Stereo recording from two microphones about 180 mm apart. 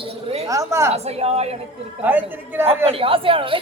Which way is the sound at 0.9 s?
35° right (ahead or behind).